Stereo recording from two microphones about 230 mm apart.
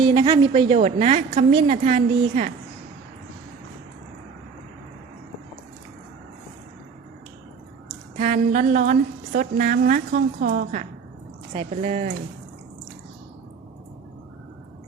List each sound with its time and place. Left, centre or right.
0.0 s a woman's voice: centre
8.1 s a woman's voice: right